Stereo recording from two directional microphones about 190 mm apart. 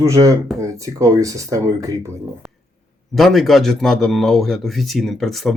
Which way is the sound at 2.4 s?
5° right (ahead or behind).